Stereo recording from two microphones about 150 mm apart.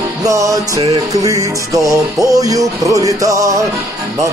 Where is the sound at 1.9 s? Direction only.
20° right (ahead or behind).